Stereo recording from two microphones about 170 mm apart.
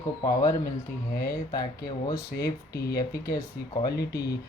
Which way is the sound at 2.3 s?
70° left (ahead or behind).